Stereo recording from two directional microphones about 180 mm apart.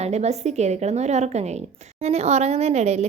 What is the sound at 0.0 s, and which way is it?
A woman's voice, 35° right (ahead or behind).